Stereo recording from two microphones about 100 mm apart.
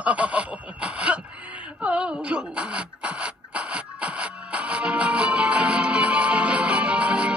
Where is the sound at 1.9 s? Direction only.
15° right (ahead or behind).